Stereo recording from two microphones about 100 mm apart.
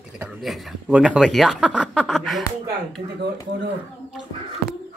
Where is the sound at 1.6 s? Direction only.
10° left (ahead or behind).